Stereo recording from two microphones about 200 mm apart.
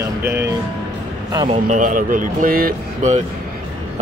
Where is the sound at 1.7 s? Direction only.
40° right (ahead or behind).